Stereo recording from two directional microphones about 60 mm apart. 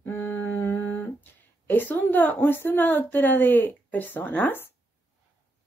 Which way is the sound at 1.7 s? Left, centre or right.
Left.